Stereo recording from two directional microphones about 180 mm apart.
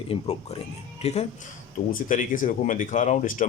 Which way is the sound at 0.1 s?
35° left (ahead or behind).